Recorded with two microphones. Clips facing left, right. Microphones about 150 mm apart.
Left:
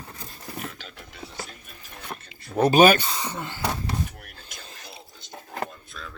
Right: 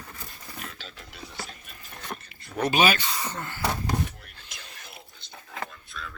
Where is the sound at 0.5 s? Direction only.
15° left (ahead or behind).